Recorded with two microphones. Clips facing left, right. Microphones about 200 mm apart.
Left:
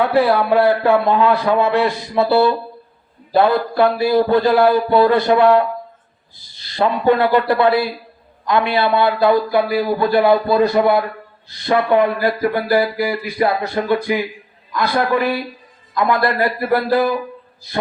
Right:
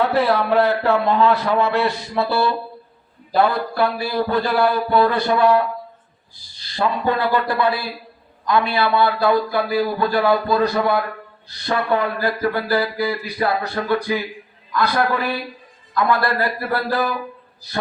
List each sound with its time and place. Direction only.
0.0 s a man's voice: 15° left (ahead or behind)
6.7 s a man's voice: 20° left (ahead or behind)